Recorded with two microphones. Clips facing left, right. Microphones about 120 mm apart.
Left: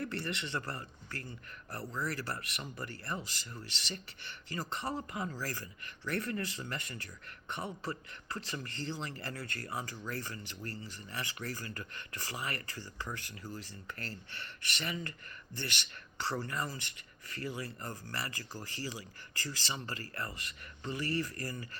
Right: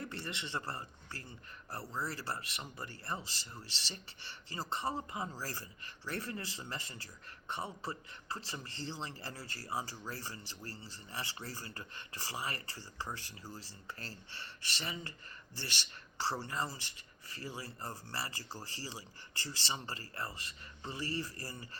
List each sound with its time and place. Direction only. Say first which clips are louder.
0.0 s speech: left 5 dB; 25° right (ahead or behind)